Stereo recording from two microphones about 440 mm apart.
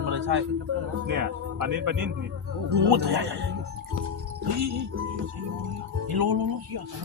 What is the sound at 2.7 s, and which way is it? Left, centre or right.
Speech, right.